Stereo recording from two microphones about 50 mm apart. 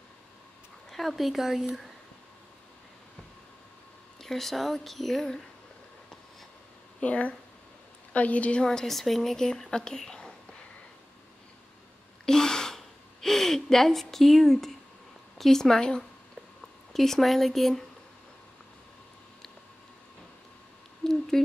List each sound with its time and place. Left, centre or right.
0.8 s speech: centre
4.2 s speech: centre
7.0 s a woman's voice: left
8.6 s speech: centre
12.3 s gasp: centre
15.3 s speech: centre
21.0 s a sound: centre